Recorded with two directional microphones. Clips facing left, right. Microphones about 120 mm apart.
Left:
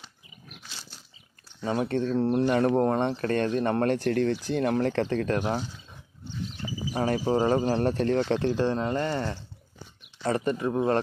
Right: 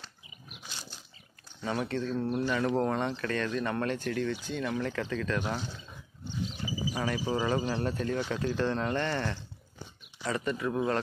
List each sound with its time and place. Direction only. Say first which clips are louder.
1.6 s speech: left 5 dB; 25° left (ahead or behind)
1.9 s speech: left 6 dB; 40° left (ahead or behind)
2.4 s speech: left 6 dB; 45° left (ahead or behind)
2.8 s speech: left 5 dB; 35° left (ahead or behind)
4.0 s speech: left 7 dB; 65° left (ahead or behind)
4.6 s speech: left 9 dB; 50° left (ahead or behind)
6.9 s speech: left 7 dB; 45° left (ahead or behind)
7.9 s speech: left 7 dB; 70° left (ahead or behind)
8.2 s speech: left 6 dB; 30° left (ahead or behind)
10.2 s speech: left 5 dB; 40° left (ahead or behind)